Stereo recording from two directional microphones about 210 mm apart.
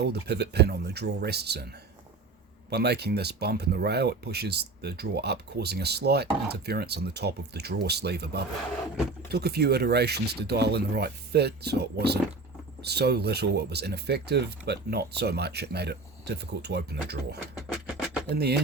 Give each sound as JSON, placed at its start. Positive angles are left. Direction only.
{"t": 0.0, "sound": "speech", "side_deg": -50}
{"t": 2.6, "sound": "speech", "side_deg": -50}
{"t": 17.6, "sound": "a sound", "side_deg": 0}